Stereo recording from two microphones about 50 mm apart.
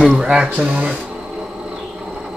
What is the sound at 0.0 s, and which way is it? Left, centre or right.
Speech, centre.